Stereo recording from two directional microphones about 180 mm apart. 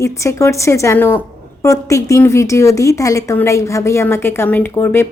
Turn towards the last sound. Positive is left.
turn(degrees=15)  # may be behind; listen again after turning